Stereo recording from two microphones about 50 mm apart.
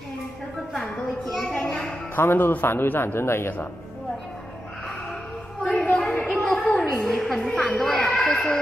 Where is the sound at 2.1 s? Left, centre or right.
Left.